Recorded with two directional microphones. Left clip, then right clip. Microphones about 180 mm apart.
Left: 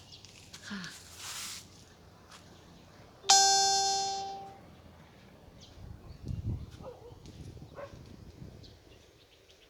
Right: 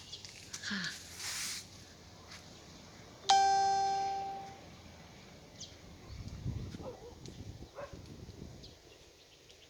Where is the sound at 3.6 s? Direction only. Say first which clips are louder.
Left 2 dB; 40° left (ahead or behind).